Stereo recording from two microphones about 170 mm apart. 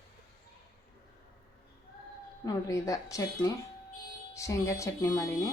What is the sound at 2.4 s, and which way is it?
A woman's voice, 20° left (ahead or behind).